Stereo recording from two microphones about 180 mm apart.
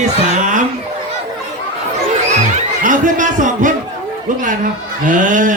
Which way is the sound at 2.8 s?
45° right (ahead or behind).